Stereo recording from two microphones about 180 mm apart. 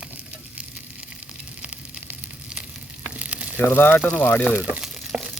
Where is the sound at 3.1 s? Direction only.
5° right (ahead or behind).